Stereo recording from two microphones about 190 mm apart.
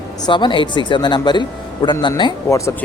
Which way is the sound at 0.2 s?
25° left (ahead or behind).